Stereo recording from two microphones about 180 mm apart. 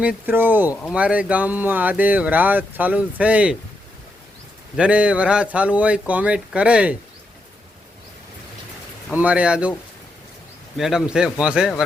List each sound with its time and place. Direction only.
0.0 s speech: 10° right (ahead or behind)
4.8 s speech: 5° right (ahead or behind)
9.1 s speech: 5° right (ahead or behind)
10.8 s speech: centre (ahead or behind)